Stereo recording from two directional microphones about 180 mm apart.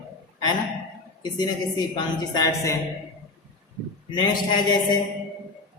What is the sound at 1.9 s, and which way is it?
Speech, 20° left (ahead or behind).